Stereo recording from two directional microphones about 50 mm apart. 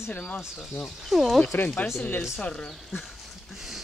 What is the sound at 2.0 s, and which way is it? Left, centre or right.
Speech, left.